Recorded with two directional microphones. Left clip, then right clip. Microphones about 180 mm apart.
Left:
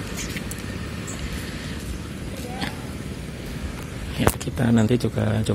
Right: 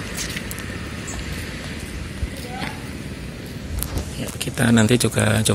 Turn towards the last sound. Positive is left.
turn(degrees=5)  # may be behind; listen again after turning